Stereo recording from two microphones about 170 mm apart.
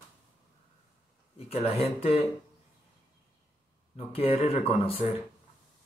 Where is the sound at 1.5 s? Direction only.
35° left (ahead or behind).